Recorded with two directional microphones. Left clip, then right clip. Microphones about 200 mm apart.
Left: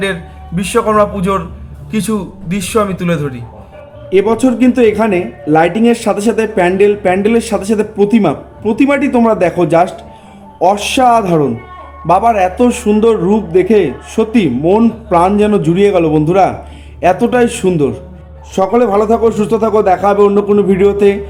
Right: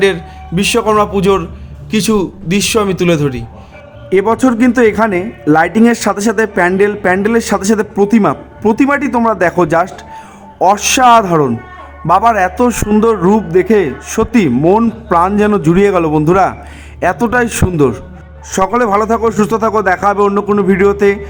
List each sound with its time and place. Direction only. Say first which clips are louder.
0.0 s a man's voice: right 5 dB; 45° right (ahead or behind)